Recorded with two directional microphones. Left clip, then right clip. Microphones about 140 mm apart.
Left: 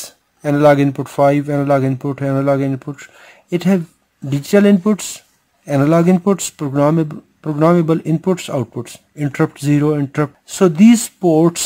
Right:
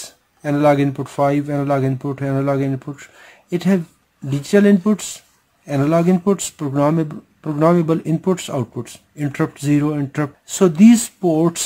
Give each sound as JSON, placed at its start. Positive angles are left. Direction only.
{"t": 0.0, "sound": "speech", "side_deg": 45}